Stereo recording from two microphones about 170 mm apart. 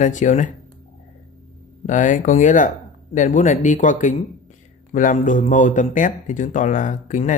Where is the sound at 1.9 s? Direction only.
45° left (ahead or behind).